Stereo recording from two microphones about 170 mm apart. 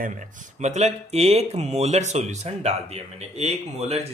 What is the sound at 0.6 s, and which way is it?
Speech, 40° right (ahead or behind).